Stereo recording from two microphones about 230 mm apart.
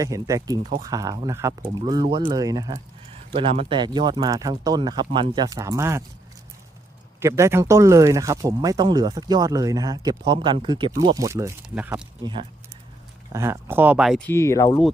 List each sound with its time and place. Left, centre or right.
0.0 s speech: centre
7.2 s speech: centre
12.2 s speech: right; by 14.2 s centre
14.3 s speech: centre